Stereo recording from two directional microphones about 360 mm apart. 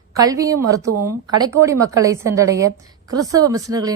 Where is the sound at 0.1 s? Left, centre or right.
Centre.